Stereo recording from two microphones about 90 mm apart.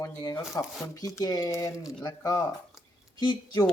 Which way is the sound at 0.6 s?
35° left (ahead or behind).